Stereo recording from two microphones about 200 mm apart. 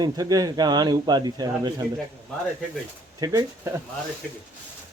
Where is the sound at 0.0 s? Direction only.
20° right (ahead or behind).